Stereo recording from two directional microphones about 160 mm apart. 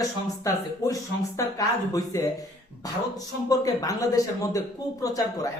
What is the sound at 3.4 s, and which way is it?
Speech, 20° left (ahead or behind).